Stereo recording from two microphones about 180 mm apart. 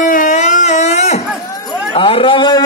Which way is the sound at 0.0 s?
45° left (ahead or behind).